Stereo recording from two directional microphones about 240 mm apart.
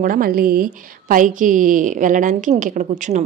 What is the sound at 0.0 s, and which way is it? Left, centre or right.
A woman's voice, right.